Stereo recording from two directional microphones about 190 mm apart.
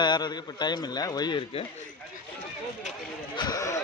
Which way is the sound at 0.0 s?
20° left (ahead or behind).